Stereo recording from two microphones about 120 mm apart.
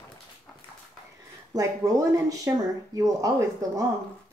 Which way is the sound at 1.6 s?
30° right (ahead or behind).